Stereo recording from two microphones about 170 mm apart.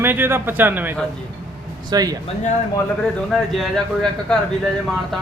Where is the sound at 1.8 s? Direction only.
25° right (ahead or behind).